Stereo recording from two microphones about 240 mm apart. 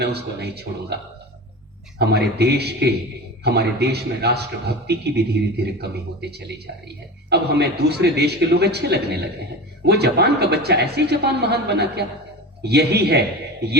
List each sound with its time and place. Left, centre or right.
0.0 s a woman's voice: right
2.0 s a woman's voice: right